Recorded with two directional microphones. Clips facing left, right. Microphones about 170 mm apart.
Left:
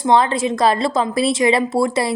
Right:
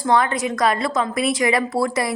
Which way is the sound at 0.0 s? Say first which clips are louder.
Left 3 dB; 25° left (ahead or behind).